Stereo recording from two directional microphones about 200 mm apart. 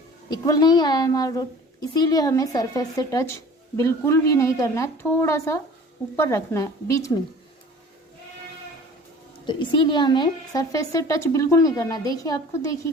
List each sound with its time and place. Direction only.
0.3 s a woman's voice: 20° left (ahead or behind)
9.5 s a woman's voice: 25° left (ahead or behind)